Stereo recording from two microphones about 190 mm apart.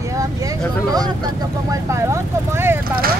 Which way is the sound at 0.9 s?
20° right (ahead or behind).